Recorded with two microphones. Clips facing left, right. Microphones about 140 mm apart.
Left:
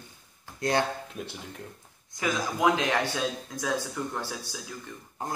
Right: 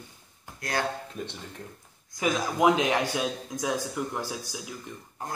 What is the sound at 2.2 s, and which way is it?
Speech, 20° right (ahead or behind).